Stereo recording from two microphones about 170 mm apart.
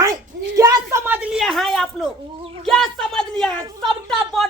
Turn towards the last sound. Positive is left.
turn(degrees=0)  # may be behind; listen again after turning